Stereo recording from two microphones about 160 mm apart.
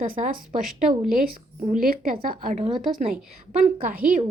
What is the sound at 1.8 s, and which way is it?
Speech, 65° right (ahead or behind).